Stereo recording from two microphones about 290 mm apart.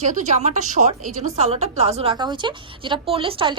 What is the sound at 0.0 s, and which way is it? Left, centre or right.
A woman's voice, right.